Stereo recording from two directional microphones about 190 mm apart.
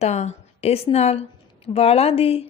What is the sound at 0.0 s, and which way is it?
A woman's voice, 35° left (ahead or behind).